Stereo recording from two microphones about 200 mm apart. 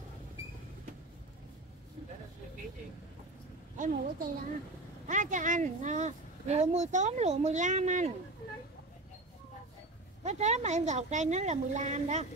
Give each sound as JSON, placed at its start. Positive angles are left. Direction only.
{"t": 3.7, "sound": "speech", "side_deg": -40}
{"t": 10.2, "sound": "speech", "side_deg": -35}